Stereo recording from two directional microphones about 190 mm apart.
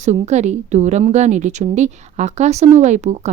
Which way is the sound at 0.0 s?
35° right (ahead or behind).